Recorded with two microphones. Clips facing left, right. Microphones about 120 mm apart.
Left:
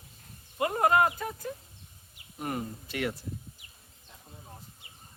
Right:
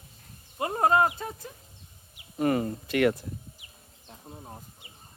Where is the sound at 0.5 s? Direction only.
25° right (ahead or behind).